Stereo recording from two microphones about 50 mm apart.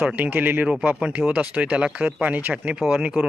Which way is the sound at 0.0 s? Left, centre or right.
Right.